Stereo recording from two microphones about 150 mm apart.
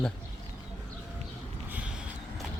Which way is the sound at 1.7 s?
5° right (ahead or behind).